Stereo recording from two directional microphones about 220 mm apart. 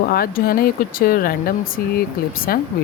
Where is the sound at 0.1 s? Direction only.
40° left (ahead or behind).